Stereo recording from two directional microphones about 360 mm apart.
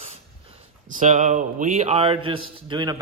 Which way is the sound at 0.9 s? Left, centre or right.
Right.